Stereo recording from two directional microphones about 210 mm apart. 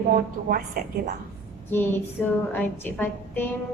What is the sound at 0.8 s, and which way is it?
Speech, 45° right (ahead or behind).